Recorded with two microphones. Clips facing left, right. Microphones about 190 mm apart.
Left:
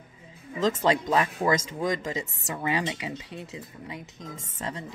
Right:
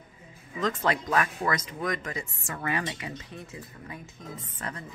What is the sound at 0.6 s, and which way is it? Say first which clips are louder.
Speech: left 4 dB; 25° left (ahead or behind).